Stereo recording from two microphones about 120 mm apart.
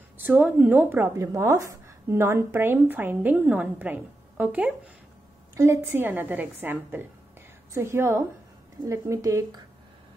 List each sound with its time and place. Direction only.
0.2 s a woman's voice: 15° right (ahead or behind)